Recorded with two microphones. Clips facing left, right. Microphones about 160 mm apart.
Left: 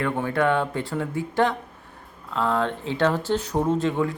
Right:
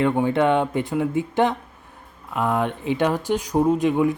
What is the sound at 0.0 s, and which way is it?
Speech, 20° right (ahead or behind).